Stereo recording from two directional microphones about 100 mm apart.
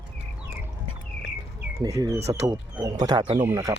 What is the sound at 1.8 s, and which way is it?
Speech, 35° right (ahead or behind).